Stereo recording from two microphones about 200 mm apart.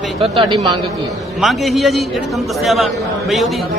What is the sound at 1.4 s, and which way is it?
A man's voice, centre (ahead or behind).